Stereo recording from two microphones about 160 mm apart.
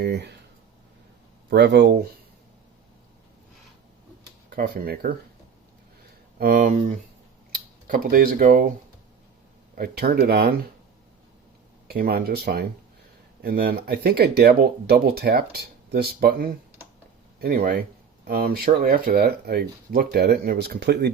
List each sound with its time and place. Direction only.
0.0 s speech: 90° right
1.5 s speech: 90° right
4.4 s speech: 75° right (ahead or behind)
6.4 s speech: 65° right (ahead or behind)
9.7 s speech: 75° right (ahead or behind)
11.9 s speech: 75° right (ahead or behind); by 21.1 s 90° right